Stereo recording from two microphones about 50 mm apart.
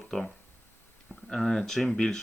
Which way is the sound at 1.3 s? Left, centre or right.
Centre.